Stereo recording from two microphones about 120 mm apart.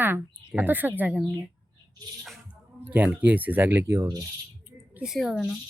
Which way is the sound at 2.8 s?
10° right (ahead or behind).